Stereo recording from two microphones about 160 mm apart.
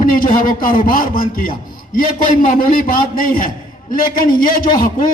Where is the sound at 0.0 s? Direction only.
60° left (ahead or behind).